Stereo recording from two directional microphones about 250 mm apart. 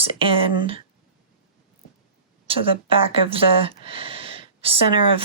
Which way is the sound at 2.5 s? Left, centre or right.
Right.